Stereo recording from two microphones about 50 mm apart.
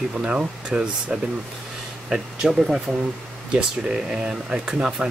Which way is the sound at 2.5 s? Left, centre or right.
Centre.